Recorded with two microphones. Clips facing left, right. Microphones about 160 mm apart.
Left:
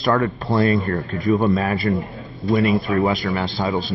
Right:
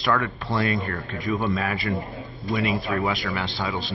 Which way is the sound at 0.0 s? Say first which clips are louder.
Left 5 dB; 40° left (ahead or behind).